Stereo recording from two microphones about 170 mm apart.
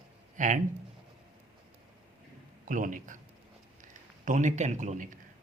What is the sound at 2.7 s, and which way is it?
Speech, 50° right (ahead or behind).